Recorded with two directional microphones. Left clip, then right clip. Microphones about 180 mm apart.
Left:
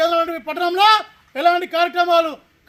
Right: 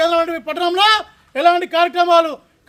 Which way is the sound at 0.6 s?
35° right (ahead or behind).